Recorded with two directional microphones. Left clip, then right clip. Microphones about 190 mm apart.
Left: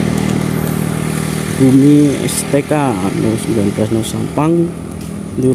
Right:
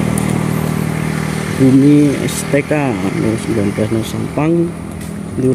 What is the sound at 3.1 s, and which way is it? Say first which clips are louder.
Speech: left 1 dB; 60° left (ahead or behind).